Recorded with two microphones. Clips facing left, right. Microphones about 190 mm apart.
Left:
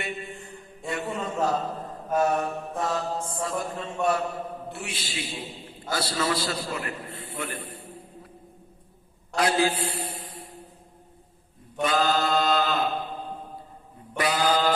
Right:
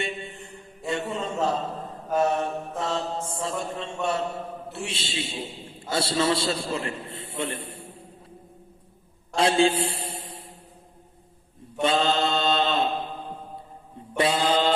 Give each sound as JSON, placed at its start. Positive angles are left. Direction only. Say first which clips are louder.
{"t": 0.0, "sound": "mantra", "louder": "right 2 dB", "side_deg": -25}
{"t": 4.7, "sound": "a man's voice", "louder": "right 2 dB", "side_deg": -25}
{"t": 9.3, "sound": "a man's voice", "louder": "right 3 dB", "side_deg": -25}
{"t": 11.8, "sound": "mantra", "louder": "right 1 dB", "side_deg": -25}
{"t": 14.2, "sound": "mantra", "louder": "right 1 dB", "side_deg": -25}